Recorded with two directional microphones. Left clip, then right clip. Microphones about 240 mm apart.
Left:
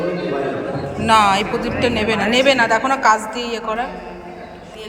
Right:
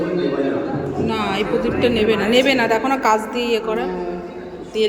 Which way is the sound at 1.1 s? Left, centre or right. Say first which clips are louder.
Left 9 dB; centre.